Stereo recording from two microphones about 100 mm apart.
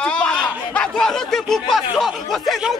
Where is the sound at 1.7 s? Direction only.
Centre (ahead or behind).